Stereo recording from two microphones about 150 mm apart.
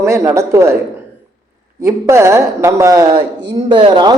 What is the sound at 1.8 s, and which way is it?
A man's voice, 20° right (ahead or behind).